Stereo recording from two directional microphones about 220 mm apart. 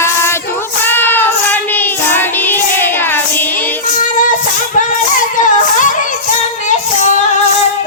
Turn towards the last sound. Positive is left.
turn(degrees=35)  # may be behind; listen again after turning